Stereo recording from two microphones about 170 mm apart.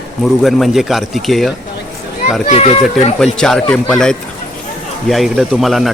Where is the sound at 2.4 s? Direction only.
40° left (ahead or behind).